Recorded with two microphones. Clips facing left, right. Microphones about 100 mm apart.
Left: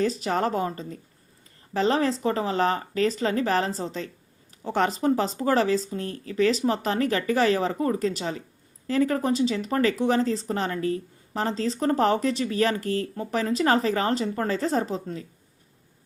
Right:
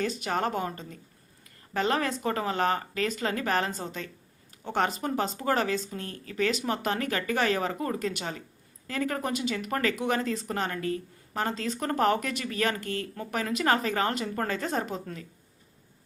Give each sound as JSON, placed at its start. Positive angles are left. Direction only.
{"t": 0.0, "sound": "speech", "side_deg": 35}